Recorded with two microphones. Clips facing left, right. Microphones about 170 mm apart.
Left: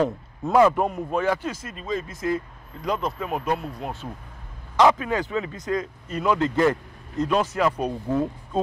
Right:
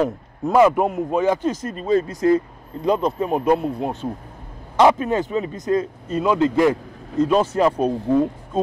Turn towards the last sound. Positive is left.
turn(degrees=-30)  # may be behind; listen again after turning